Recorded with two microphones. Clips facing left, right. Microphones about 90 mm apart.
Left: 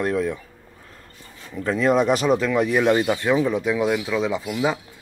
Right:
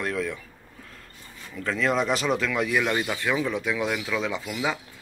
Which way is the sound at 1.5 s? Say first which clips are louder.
Left 6 dB; 25° left (ahead or behind).